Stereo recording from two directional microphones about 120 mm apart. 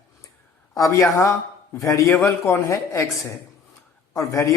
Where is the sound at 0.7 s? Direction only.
25° left (ahead or behind).